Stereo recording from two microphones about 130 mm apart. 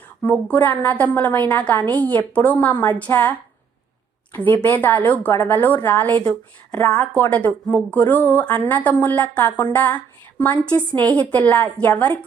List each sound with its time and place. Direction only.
0.3 s a woman's voice: 15° left (ahead or behind)
4.4 s a woman's voice: 15° left (ahead or behind)